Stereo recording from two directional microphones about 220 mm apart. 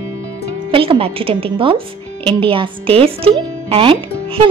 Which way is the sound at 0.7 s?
25° right (ahead or behind).